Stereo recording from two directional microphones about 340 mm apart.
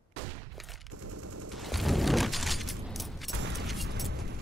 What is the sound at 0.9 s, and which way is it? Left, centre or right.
Machine gun, right.